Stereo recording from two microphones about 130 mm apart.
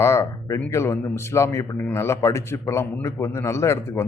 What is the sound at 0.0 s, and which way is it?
A man's voice, 20° left (ahead or behind).